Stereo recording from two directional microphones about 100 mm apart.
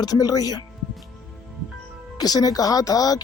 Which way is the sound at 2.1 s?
40° left (ahead or behind).